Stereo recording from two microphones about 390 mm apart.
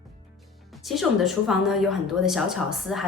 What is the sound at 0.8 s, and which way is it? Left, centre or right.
A woman's voice, centre.